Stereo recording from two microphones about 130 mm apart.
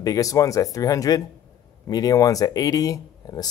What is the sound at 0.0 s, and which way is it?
Speech, 25° left (ahead or behind).